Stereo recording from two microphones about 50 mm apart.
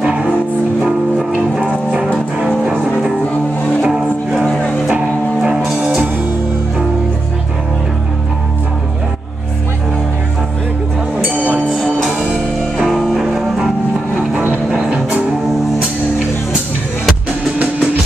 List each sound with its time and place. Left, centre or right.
1.6 s music: centre
3.8 s music: centre
11.2 s music: right
12.8 s music: centre
14.7 s music: right